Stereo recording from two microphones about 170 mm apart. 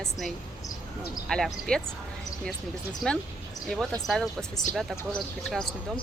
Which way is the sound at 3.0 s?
Centre (ahead or behind).